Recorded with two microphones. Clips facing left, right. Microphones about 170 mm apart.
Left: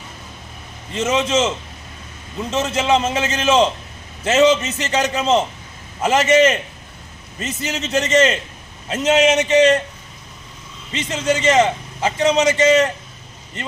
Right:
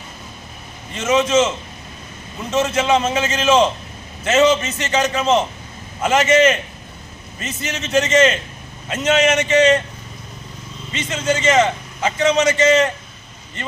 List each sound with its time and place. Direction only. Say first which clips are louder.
0.9 s a man's voice: right 2 dB; 30° left (ahead or behind)
2.6 s a man's voice: right 1 dB; 30° left (ahead or behind)
10.9 s a man's voice: left 1 dB; 35° left (ahead or behind)